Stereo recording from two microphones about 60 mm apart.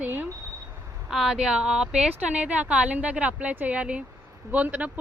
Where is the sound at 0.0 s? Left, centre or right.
Right.